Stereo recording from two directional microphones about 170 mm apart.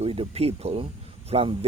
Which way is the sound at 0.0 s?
35° right (ahead or behind).